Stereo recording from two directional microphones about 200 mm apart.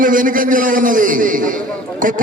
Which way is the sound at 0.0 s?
45° right (ahead or behind).